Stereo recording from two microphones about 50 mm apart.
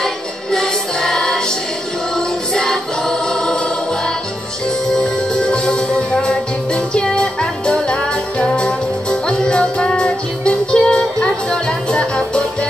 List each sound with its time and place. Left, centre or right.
0.0 s music: centre
4.9 s music: centre